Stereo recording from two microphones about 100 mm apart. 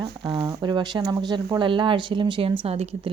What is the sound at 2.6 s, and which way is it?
Speech, 85° right.